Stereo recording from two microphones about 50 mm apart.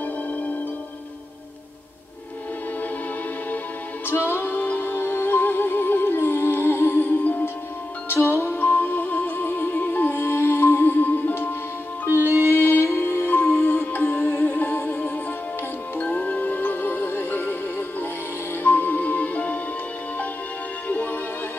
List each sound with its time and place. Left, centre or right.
4.1 s music: left
7.1 s music: left
8.1 s music: left
8.5 s music: left
12.1 s music: right
12.8 s music: left
13.3 s music: left
14.6 s music: left
16.0 s music: left
18.6 s music: left
20.9 s music: left